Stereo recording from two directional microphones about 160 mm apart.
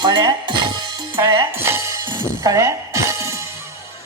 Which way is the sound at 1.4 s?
15° right (ahead or behind).